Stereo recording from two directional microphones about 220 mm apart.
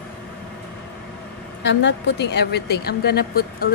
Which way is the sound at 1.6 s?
55° left (ahead or behind).